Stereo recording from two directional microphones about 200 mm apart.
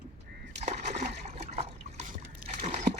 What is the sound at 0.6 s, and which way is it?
Splash, 35° right (ahead or behind).